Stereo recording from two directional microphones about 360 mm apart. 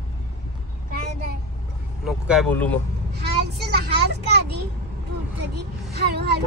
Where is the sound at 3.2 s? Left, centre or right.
Right.